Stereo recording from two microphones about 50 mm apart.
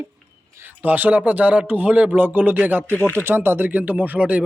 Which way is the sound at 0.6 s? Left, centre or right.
Right.